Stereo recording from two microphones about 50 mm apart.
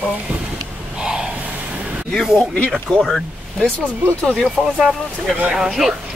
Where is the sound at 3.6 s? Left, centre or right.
Left.